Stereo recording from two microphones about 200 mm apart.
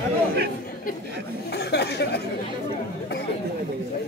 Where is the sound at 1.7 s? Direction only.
55° left (ahead or behind).